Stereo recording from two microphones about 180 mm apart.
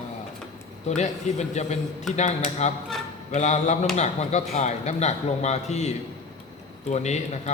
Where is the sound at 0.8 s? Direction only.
40° left (ahead or behind).